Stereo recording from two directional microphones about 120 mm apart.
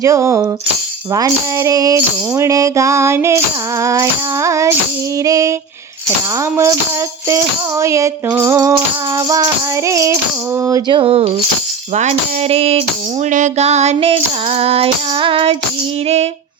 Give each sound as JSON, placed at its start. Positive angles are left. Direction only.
{"t": 0.0, "sound": "music", "side_deg": -25}
{"t": 10.9, "sound": "speech", "side_deg": -55}
{"t": 11.9, "sound": "female singing", "side_deg": -70}
{"t": 13.3, "sound": "female singing", "side_deg": -75}
{"t": 16.0, "sound": "female singing", "side_deg": -65}